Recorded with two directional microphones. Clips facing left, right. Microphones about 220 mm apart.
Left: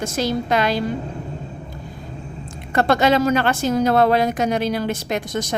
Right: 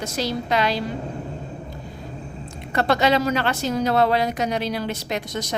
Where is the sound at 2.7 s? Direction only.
50° left (ahead or behind).